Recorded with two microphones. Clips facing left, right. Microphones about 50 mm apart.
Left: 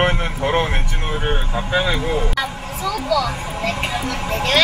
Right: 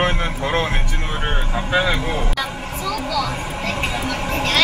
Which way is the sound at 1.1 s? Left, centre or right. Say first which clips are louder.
Left 3 dB; right.